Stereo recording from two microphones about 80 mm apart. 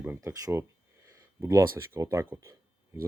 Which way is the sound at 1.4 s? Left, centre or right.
Right.